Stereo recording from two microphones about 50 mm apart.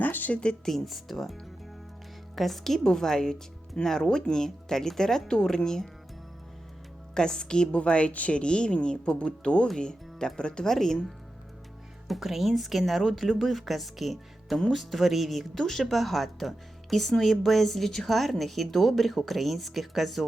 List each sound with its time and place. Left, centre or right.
0.0 s a sound: left
0.6 s speech: centre
7.1 s a woman's voice: centre